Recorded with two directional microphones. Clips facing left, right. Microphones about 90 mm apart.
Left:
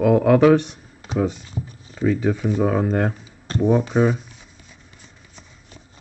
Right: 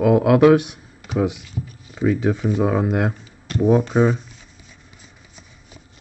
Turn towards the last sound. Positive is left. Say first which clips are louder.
# even
turn(degrees=-5)  # may be behind; listen again after turning